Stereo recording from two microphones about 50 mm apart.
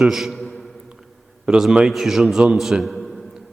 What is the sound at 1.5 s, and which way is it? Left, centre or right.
Speech, right.